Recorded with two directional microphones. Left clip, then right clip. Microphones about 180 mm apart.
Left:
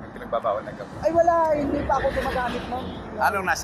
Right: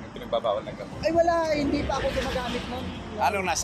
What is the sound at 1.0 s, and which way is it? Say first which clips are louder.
Speech: left 3 dB; 30° right (ahead or behind).